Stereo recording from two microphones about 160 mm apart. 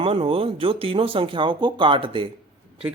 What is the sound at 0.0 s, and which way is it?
Speech, 35° right (ahead or behind).